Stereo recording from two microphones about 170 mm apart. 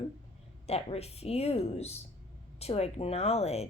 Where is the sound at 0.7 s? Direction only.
35° left (ahead or behind).